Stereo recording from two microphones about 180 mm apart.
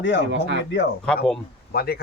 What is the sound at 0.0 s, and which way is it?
Speech, 80° left.